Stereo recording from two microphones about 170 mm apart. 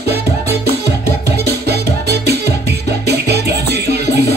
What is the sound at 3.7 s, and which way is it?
Music, 70° right (ahead or behind).